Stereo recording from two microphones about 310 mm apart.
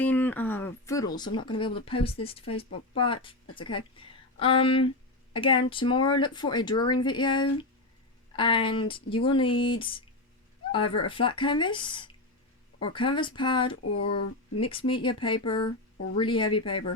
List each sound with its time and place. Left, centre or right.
0.0 s a woman's voice: centre